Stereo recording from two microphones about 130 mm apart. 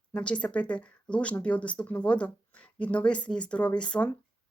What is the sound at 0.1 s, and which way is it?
Speech, 10° left (ahead or behind).